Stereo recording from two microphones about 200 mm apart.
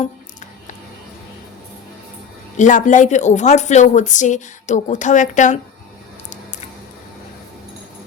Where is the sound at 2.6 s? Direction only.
40° left (ahead or behind).